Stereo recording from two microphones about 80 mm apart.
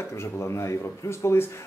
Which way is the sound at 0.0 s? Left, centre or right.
Left.